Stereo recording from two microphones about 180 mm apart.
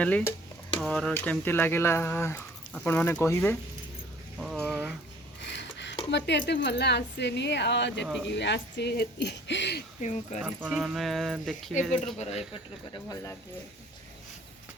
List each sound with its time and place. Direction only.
0.0 s speech: 10° left (ahead or behind)
4.4 s speech: 5° right (ahead or behind)
4.7 s a sound: 10° right (ahead or behind)
5.4 s a sound: 75° left (ahead or behind)
6.1 s speech: 75° left (ahead or behind)
10.0 s speech: 45° left (ahead or behind)
10.4 s speech: 5° right (ahead or behind)
12.9 s speech: 20° left (ahead or behind)